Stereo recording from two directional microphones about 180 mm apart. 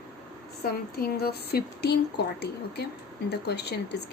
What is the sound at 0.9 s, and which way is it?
A woman's voice, 60° left (ahead or behind).